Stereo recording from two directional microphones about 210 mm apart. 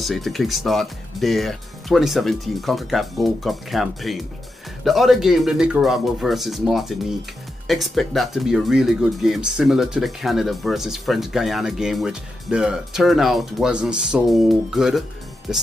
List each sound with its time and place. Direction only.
0.0 s speech: centre (ahead or behind)